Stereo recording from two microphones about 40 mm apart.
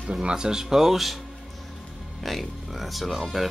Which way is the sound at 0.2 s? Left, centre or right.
Centre.